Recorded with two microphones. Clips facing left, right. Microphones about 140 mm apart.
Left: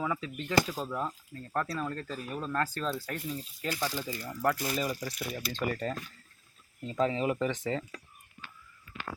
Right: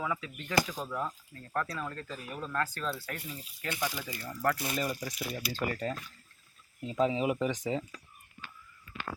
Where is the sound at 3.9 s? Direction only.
10° right (ahead or behind).